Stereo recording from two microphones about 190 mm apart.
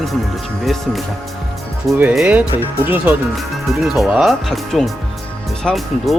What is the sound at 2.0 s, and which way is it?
Speech, 5° right (ahead or behind).